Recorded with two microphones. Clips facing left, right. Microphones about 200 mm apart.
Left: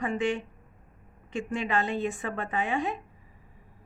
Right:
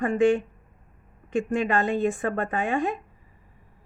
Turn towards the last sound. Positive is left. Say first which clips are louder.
# right 4 dB
turn(degrees=-50)  # may be behind; listen again after turning